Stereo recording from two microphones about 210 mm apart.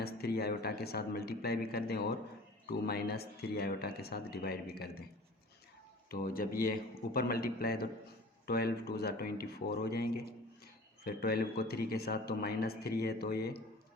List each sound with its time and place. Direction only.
0.0 s a man's voice: 50° left (ahead or behind)
6.1 s a man's voice: 45° left (ahead or behind)